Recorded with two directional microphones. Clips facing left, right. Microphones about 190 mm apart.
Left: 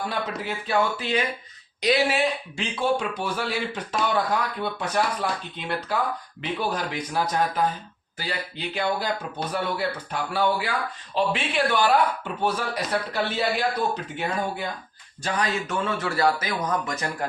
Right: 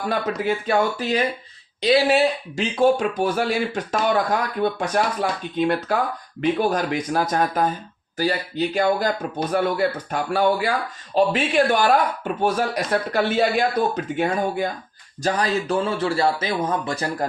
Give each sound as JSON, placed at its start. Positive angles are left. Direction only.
{"t": 0.1, "sound": "speech", "side_deg": -50}
{"t": 15.2, "sound": "speech", "side_deg": -35}